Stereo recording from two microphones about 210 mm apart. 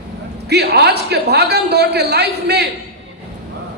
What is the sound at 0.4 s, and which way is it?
A man's voice, 50° right (ahead or behind).